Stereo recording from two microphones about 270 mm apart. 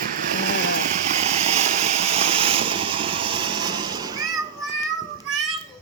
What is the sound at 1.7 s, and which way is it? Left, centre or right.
Vehicle, right.